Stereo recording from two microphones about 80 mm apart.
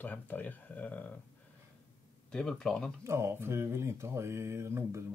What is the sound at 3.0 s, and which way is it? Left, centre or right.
Mantra, right.